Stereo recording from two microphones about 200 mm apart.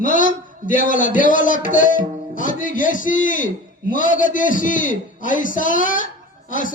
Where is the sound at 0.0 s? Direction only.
40° left (ahead or behind).